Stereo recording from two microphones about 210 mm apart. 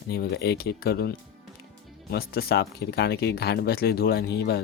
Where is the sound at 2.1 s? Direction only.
45° left (ahead or behind).